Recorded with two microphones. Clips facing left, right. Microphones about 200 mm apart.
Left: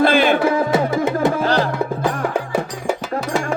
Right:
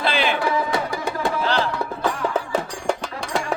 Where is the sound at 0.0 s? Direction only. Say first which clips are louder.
Left 8 dB; 50° left (ahead or behind).